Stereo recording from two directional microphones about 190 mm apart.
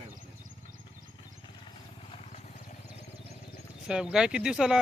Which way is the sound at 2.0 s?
30° left (ahead or behind).